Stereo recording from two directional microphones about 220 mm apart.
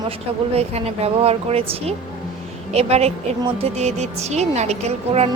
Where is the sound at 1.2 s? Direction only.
30° right (ahead or behind).